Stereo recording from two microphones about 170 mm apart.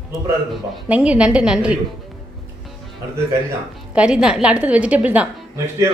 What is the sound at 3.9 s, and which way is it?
A woman's voice, 5° right (ahead or behind).